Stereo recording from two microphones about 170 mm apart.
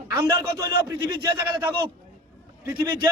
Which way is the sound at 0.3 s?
20° right (ahead or behind).